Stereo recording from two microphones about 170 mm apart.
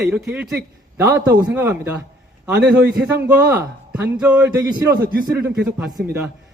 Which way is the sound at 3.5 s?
10° right (ahead or behind).